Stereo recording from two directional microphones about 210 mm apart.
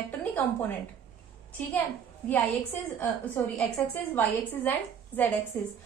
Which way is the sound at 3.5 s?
5° left (ahead or behind).